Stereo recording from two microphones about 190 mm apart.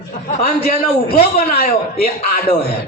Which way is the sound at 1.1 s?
50° left (ahead or behind).